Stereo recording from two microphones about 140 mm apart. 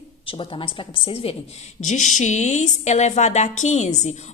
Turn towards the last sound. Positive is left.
turn(degrees=55)  # may be behind; listen again after turning